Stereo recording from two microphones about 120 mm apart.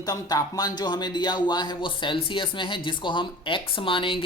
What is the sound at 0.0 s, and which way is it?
Speech, 30° left (ahead or behind).